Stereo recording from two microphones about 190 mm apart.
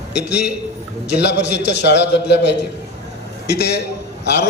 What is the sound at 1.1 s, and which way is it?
A man's voice, 65° left (ahead or behind).